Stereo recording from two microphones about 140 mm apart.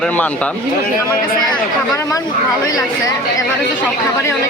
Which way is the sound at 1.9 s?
25° left (ahead or behind).